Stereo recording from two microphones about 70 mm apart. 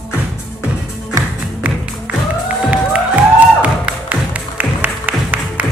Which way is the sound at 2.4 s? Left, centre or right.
Centre.